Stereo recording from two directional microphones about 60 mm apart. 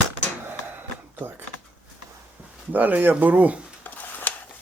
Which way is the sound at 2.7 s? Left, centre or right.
Right.